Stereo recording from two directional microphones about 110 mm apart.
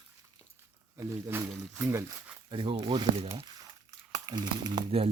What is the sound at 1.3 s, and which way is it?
Speech, 20° right (ahead or behind).